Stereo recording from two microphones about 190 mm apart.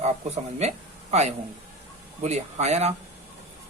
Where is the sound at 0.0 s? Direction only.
35° right (ahead or behind).